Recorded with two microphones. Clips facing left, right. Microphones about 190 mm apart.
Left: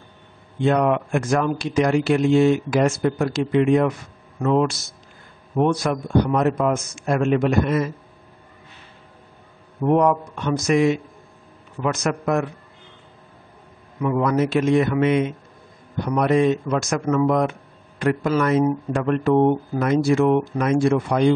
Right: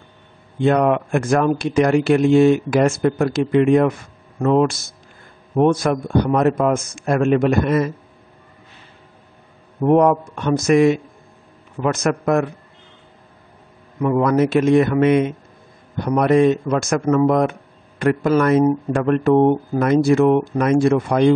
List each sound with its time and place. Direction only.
0.7 s speech: 50° right (ahead or behind)
9.8 s speech: 50° right (ahead or behind)
14.0 s speech: 50° right (ahead or behind)